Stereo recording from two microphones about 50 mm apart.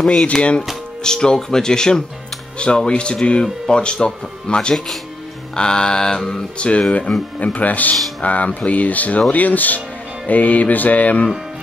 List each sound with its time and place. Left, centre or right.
0.0 s speech: centre
6.9 s speech: left
9.3 s music: left